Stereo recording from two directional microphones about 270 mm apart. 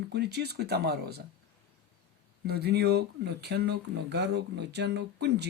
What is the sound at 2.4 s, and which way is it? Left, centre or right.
Speech, right.